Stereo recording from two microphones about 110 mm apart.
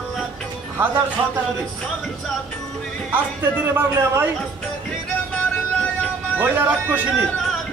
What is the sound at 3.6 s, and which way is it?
Speech, 25° right (ahead or behind).